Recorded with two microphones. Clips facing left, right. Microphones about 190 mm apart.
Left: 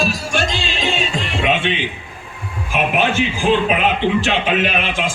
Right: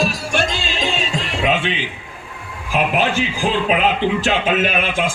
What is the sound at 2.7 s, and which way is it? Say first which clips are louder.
A man's voice: even; 35° right (ahead or behind).